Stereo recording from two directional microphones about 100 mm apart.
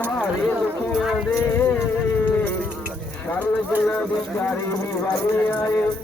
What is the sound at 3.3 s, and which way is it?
Speech, 15° left (ahead or behind).